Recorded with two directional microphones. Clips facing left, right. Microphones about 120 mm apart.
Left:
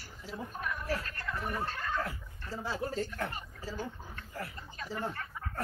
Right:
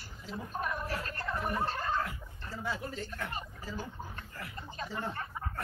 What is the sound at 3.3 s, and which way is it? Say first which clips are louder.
Speech: right 1 dB; 25° right (ahead or behind).